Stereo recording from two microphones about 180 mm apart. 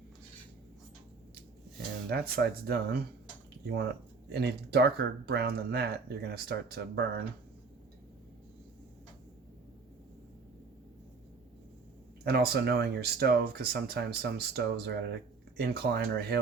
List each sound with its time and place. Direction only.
2.0 s speech: 60° right (ahead or behind)
4.3 s speech: 65° right (ahead or behind)
12.2 s speech: 60° right (ahead or behind)